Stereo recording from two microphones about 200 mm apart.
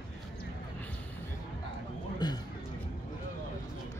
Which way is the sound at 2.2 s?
20° left (ahead or behind).